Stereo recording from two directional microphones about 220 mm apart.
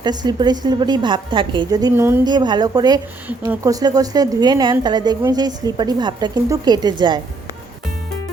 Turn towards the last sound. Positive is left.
turn(degrees=-20)  # may be behind; listen again after turning